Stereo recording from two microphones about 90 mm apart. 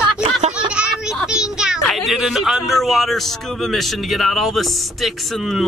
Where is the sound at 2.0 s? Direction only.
Centre (ahead or behind).